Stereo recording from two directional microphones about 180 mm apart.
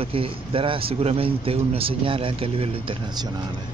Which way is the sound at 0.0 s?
30° right (ahead or behind).